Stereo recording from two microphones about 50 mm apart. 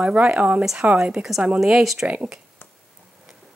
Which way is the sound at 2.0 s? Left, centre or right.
Right.